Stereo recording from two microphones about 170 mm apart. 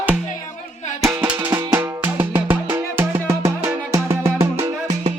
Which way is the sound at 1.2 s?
10° right (ahead or behind).